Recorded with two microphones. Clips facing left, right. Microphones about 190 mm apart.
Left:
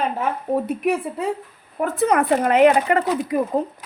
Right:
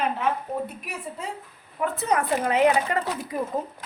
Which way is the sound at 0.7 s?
60° left (ahead or behind).